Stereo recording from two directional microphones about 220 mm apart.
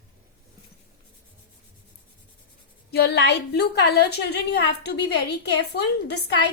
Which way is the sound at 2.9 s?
50° left (ahead or behind).